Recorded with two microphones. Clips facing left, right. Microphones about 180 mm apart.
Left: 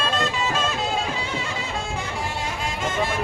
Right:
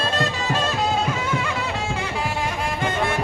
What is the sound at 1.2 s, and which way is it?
Music, 60° right (ahead or behind).